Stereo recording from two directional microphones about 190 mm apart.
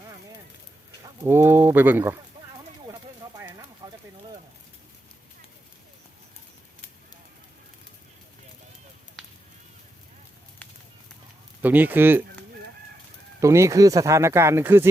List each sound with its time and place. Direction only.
1.3 s speech: 10° right (ahead or behind)
3.8 s a sound: 20° right (ahead or behind)
11.6 s speech: 10° right (ahead or behind)
13.4 s speech: 15° right (ahead or behind)